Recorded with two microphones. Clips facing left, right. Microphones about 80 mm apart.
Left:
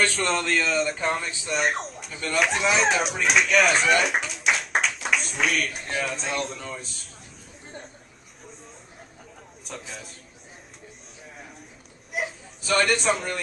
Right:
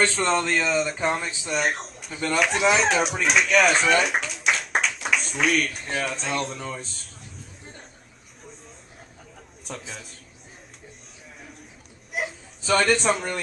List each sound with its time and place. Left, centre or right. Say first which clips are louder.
0.0 s speech: right 1 dB; right
0.5 s speech: right 1 dB; centre
9.7 s a sound: right 1 dB; centre
12.1 s whimper: even; centre
12.7 s speech: right 1 dB; centre